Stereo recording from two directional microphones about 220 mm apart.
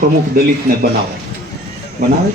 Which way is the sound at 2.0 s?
40° right (ahead or behind).